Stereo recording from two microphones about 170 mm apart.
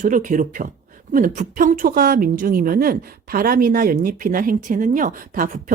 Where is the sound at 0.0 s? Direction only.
50° right (ahead or behind).